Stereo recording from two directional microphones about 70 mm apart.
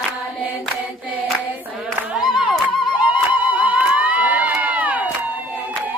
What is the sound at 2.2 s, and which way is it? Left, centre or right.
Clapping, centre.